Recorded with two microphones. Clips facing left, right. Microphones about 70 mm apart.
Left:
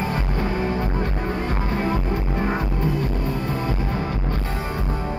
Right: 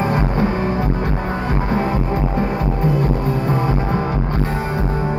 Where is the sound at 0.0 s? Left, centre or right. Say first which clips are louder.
Right 7 dB; right.